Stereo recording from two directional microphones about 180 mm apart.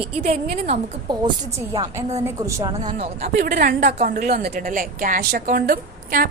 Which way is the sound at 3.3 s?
65° right (ahead or behind).